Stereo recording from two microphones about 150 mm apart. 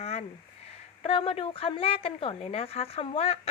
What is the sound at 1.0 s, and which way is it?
Speech, 35° left (ahead or behind).